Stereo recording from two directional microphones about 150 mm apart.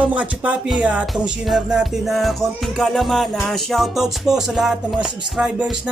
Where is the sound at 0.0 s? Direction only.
10° right (ahead or behind).